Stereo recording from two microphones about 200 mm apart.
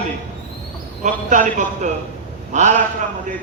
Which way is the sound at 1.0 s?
40° right (ahead or behind).